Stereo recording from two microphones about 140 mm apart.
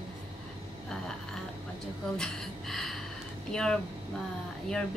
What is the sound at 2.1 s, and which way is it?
Speech, 5° left (ahead or behind).